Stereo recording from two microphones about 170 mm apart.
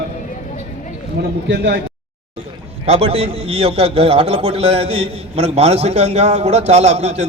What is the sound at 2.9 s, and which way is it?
A man's voice, 35° right (ahead or behind).